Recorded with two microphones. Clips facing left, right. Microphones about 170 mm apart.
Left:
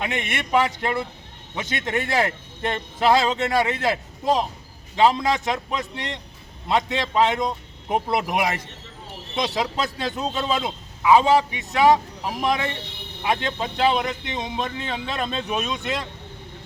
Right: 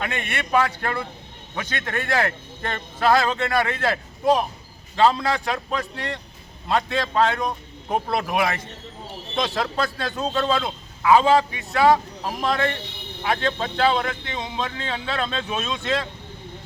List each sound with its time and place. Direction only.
0.0 s speech: 20° left (ahead or behind)